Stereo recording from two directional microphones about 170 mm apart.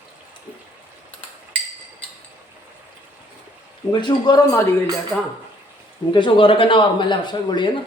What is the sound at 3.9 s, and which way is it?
Speech, 25° left (ahead or behind).